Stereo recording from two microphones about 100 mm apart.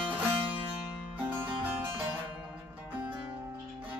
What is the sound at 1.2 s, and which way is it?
Music, 20° right (ahead or behind).